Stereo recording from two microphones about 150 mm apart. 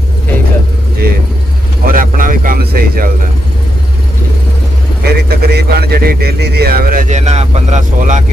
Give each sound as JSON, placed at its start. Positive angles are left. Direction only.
{"t": 1.9, "sound": "speech", "side_deg": -65}
{"t": 5.0, "sound": "speech", "side_deg": -90}